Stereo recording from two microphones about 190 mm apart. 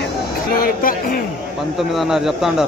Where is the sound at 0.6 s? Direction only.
50° left (ahead or behind).